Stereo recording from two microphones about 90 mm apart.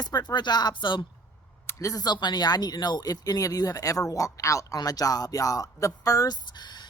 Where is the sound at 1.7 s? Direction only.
40° left (ahead or behind).